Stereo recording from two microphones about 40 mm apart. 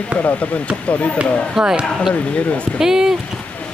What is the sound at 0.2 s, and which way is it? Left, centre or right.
Speech, left.